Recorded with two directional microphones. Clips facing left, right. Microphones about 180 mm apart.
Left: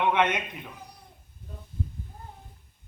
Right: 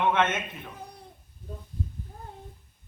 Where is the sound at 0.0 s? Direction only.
15° left (ahead or behind).